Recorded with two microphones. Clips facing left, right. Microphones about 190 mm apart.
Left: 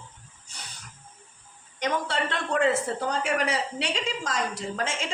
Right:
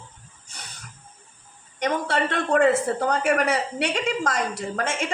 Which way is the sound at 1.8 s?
55° right (ahead or behind).